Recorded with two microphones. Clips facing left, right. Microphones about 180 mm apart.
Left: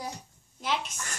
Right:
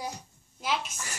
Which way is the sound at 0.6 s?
5° right (ahead or behind).